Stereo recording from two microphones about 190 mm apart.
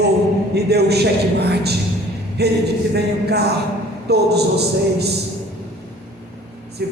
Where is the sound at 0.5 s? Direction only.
60° right (ahead or behind).